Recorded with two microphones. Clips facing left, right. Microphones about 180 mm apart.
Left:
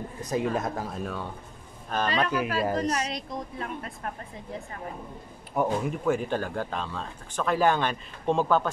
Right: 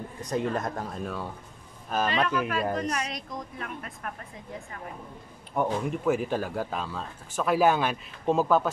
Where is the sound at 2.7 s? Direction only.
35° left (ahead or behind).